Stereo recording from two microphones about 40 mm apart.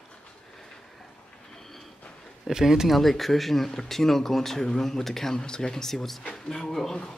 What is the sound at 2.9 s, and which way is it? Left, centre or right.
Speech, centre.